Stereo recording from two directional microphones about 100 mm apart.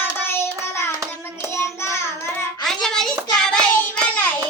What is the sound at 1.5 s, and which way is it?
Child singing, 25° left (ahead or behind).